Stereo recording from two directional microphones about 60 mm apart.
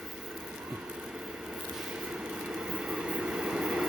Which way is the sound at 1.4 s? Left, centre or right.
Centre.